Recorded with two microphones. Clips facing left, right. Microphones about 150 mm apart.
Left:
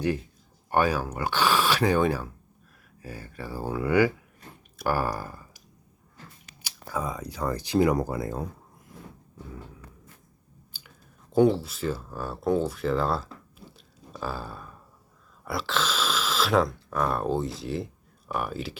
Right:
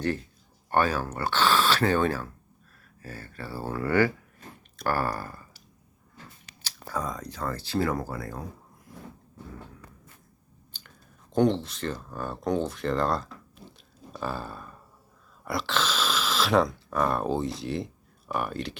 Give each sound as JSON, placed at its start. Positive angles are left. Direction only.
{"t": 0.7, "sound": "speech", "side_deg": 10}
{"t": 10.7, "sound": "speech", "side_deg": 5}
{"t": 13.7, "sound": "burping", "side_deg": 0}
{"t": 15.4, "sound": "speech", "side_deg": 0}